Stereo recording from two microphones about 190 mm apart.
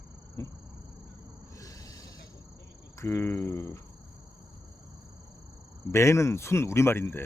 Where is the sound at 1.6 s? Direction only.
20° left (ahead or behind).